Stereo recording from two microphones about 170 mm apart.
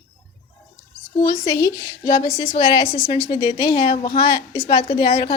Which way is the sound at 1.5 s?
20° left (ahead or behind).